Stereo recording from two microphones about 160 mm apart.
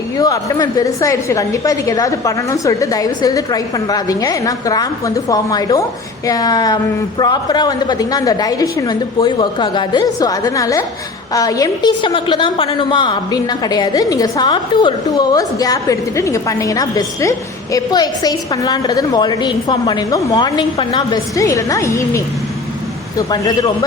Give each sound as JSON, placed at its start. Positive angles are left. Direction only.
{"t": 0.2, "sound": "a woman's voice", "side_deg": 20}